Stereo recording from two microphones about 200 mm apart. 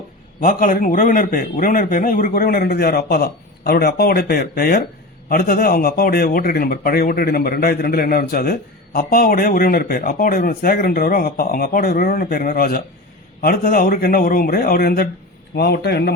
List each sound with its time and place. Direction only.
0.4 s a man's voice: 40° left (ahead or behind)